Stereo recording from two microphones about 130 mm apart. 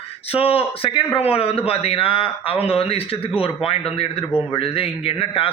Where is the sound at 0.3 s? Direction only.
45° left (ahead or behind).